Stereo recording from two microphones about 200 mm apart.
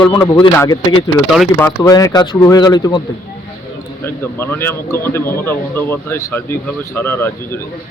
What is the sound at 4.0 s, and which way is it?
Speech, 10° left (ahead or behind).